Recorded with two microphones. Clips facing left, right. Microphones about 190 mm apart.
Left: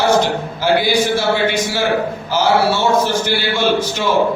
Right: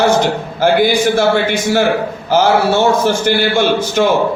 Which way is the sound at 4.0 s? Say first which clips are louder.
Right 6 dB; 55° right (ahead or behind).